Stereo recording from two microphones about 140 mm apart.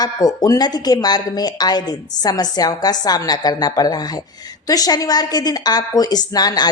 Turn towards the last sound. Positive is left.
turn(degrees=30)  # may be behind; listen again after turning